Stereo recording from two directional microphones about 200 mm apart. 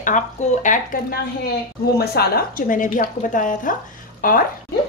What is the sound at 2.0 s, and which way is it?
A woman's voice, 50° left (ahead or behind).